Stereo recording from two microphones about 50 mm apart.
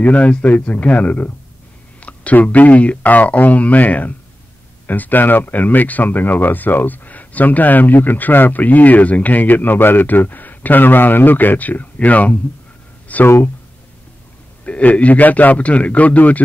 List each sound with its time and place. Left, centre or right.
0.0 s speech: left
13.1 s a sound: left
14.6 s speech: left